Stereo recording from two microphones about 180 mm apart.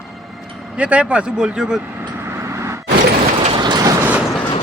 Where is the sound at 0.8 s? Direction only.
5° right (ahead or behind).